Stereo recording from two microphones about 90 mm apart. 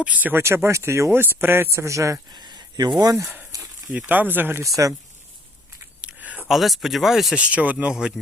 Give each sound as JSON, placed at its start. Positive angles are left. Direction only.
{"t": 0.0, "sound": "speech", "side_deg": -20}
{"t": 2.3, "sound": "a sound", "side_deg": -55}
{"t": 3.0, "sound": "speech", "side_deg": -40}
{"t": 3.9, "sound": "speech", "side_deg": -20}
{"t": 4.6, "sound": "speech", "side_deg": -40}
{"t": 6.0, "sound": "a sound", "side_deg": -15}
{"t": 6.5, "sound": "speech", "side_deg": 0}
{"t": 7.3, "sound": "speech", "side_deg": -15}